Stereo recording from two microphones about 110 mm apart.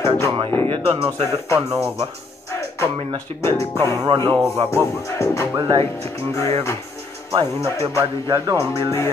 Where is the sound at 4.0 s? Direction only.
35° right (ahead or behind).